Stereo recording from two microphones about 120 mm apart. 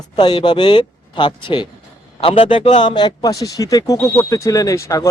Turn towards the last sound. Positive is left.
turn(degrees=25)  # may be behind; listen again after turning